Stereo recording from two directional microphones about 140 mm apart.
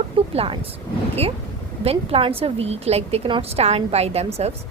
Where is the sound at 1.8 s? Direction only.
45° right (ahead or behind).